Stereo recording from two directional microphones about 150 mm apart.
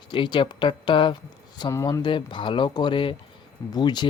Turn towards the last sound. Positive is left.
turn(degrees=30)  # may be behind; listen again after turning